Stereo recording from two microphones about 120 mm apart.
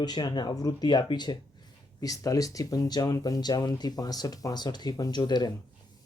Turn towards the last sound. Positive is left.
turn(degrees=35)  # may be behind; listen again after turning